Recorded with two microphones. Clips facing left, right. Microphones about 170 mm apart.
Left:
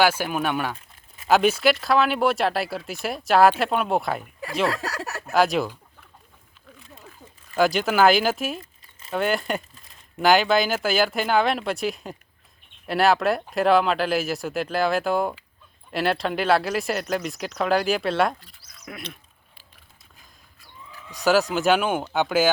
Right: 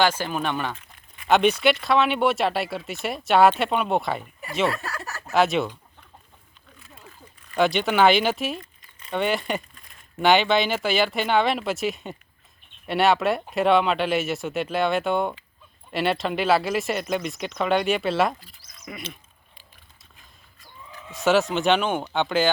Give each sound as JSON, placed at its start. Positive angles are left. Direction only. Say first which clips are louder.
{"t": 0.0, "sound": "speech", "louder": "left 1 dB", "side_deg": 10}
{"t": 4.7, "sound": "a sound", "louder": "left 3 dB", "side_deg": 90}
{"t": 5.3, "sound": "speech", "louder": "even", "side_deg": 0}
{"t": 7.5, "sound": "speech", "louder": "even", "side_deg": 0}